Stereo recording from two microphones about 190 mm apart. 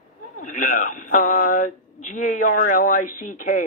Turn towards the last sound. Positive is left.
turn(degrees=45)  # may be behind; listen again after turning